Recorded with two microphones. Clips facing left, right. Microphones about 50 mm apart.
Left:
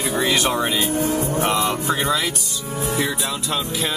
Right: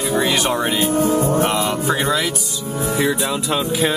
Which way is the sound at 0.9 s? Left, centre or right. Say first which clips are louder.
Right 5 dB; right.